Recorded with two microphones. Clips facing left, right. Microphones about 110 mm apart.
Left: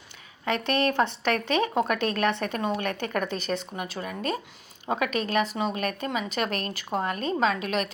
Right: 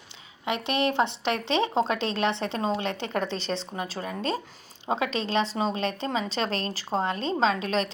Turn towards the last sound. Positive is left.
turn(degrees=-30)  # may be behind; listen again after turning